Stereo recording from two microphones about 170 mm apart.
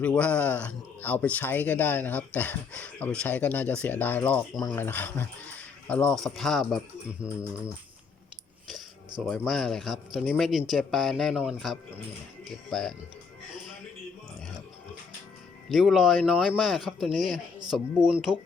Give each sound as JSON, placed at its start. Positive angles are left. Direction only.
{"t": 0.0, "sound": "speech", "side_deg": 5}
{"t": 4.6, "sound": "speech", "side_deg": 20}
{"t": 4.9, "sound": "speech", "side_deg": 10}
{"t": 9.2, "sound": "speech", "side_deg": 0}
{"t": 15.7, "sound": "speech", "side_deg": 0}